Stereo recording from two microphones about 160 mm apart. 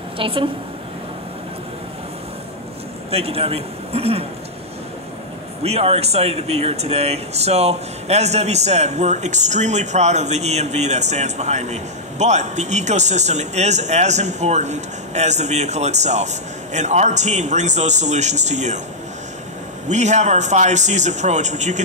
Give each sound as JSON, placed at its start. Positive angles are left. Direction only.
{"t": 0.2, "sound": "a woman's voice", "side_deg": -35}
{"t": 3.1, "sound": "a man's voice", "side_deg": -40}
{"t": 5.6, "sound": "speech", "side_deg": -40}
{"t": 19.9, "sound": "speech", "side_deg": -45}